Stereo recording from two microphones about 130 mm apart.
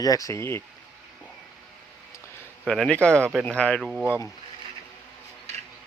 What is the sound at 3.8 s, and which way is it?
Speech, 5° right (ahead or behind).